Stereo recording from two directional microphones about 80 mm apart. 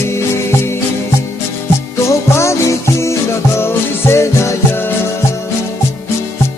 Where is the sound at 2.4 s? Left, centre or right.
Left.